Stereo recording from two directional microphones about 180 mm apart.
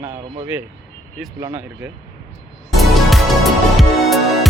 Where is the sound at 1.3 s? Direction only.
15° right (ahead or behind).